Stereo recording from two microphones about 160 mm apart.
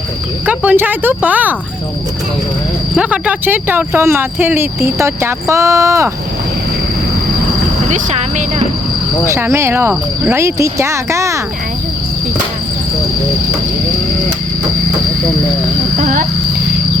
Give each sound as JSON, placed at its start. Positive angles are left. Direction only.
{"t": 0.4, "sound": "speech", "side_deg": -10}
{"t": 2.9, "sound": "speech", "side_deg": -5}
{"t": 7.9, "sound": "speech", "side_deg": -50}
{"t": 9.3, "sound": "speech", "side_deg": -15}
{"t": 16.0, "sound": "a sound", "side_deg": -55}